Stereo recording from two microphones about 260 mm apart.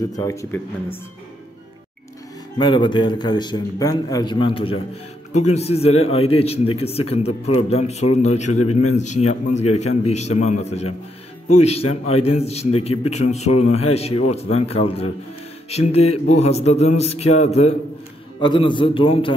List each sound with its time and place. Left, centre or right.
0.2 s a man's voice: centre
2.6 s a man's voice: centre
5.5 s music: left